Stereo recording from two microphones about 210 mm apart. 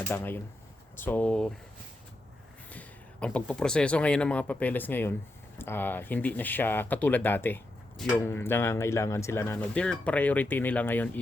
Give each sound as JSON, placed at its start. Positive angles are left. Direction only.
{"t": 0.1, "sound": "speech", "side_deg": 10}
{"t": 2.6, "sound": "speech", "side_deg": 5}